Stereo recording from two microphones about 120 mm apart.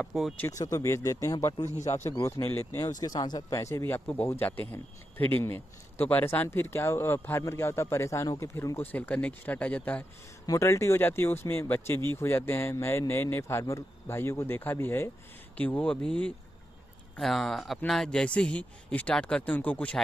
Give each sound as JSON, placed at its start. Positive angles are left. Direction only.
{"t": 0.0, "sound": "speech", "side_deg": 0}
{"t": 0.5, "sound": "speech", "side_deg": 25}
{"t": 1.8, "sound": "speech", "side_deg": 75}
{"t": 2.0, "sound": "speech", "side_deg": 25}
{"t": 10.4, "sound": "speech", "side_deg": 25}